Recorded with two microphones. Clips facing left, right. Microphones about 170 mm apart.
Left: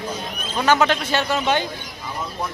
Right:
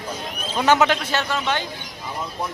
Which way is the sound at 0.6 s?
20° right (ahead or behind).